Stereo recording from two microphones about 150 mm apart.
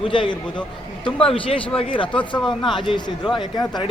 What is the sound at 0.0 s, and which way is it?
A man's voice, 35° left (ahead or behind).